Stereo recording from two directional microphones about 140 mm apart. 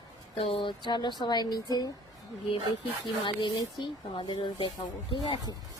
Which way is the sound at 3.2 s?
35° left (ahead or behind).